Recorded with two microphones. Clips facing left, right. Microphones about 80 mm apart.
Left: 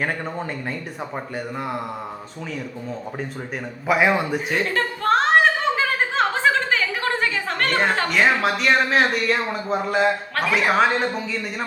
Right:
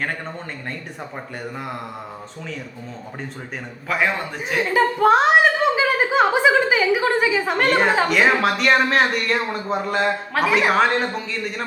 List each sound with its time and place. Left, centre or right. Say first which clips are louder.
0.0 s speech: left 2 dB; centre
3.8 s a man's voice: left 4 dB; centre
4.4 s speech: right 3 dB; centre